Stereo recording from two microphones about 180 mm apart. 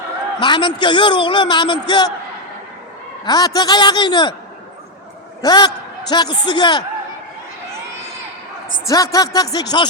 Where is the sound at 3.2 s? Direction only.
20° left (ahead or behind).